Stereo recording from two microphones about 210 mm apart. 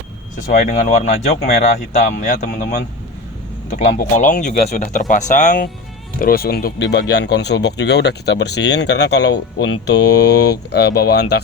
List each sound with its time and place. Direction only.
0.3 s speech: 35° left (ahead or behind); by 11.3 s 50° left (ahead or behind)